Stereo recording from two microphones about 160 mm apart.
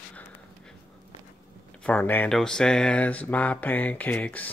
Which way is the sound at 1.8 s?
10° left (ahead or behind).